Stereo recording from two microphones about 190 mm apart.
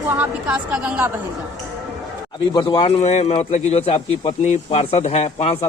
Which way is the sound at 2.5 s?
25° left (ahead or behind).